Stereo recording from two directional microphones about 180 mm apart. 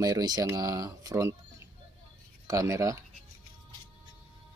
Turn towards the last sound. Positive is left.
turn(degrees=-15)  # may be behind; listen again after turning